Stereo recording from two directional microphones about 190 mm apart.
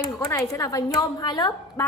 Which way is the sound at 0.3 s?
15° left (ahead or behind).